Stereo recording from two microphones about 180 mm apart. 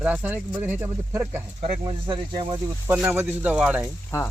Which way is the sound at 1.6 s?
30° right (ahead or behind).